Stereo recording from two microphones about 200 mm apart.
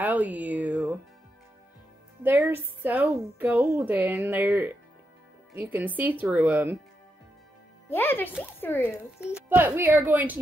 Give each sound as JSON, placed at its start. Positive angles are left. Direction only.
{"t": 0.0, "sound": "a sound", "side_deg": -10}
{"t": 2.2, "sound": "speech", "side_deg": -10}
{"t": 7.9, "sound": "speech", "side_deg": 10}
{"t": 9.2, "sound": "speech", "side_deg": -10}